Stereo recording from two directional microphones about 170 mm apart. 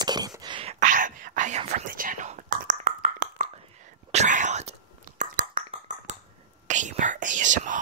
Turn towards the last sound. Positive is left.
turn(degrees=-50)  # may be behind; listen again after turning